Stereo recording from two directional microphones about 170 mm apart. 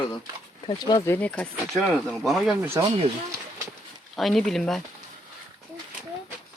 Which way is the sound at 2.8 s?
20° right (ahead or behind).